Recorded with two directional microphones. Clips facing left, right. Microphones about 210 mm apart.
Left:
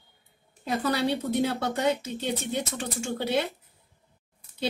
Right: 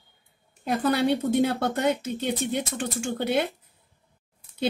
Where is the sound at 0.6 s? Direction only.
55° right (ahead or behind).